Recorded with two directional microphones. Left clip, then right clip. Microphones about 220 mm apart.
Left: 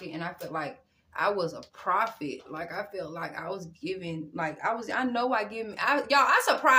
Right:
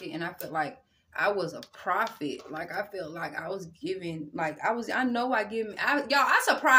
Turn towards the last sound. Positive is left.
turn(degrees=5)  # may be behind; listen again after turning